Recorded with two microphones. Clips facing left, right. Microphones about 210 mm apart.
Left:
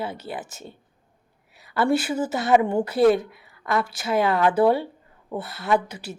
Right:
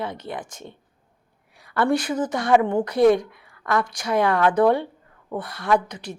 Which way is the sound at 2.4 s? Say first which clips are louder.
Even; 20° left (ahead or behind).